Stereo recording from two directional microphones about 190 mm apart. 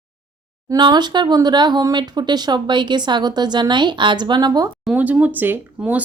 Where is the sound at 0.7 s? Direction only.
25° right (ahead or behind).